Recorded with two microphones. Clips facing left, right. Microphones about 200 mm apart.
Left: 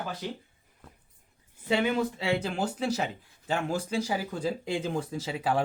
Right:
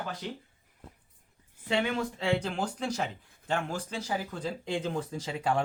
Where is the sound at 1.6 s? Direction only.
5° left (ahead or behind).